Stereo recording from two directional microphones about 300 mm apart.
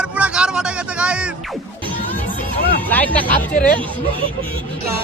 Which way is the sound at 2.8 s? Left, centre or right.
Centre.